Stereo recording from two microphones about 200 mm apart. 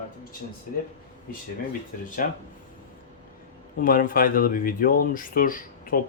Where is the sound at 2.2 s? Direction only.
45° left (ahead or behind).